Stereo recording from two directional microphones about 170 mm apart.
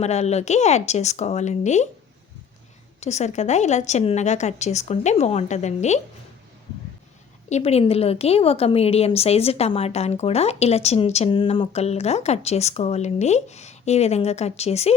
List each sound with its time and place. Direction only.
0.0 s a woman's voice: 40° left (ahead or behind)
3.0 s a woman's voice: 40° left (ahead or behind)
7.5 s a woman's voice: 40° left (ahead or behind)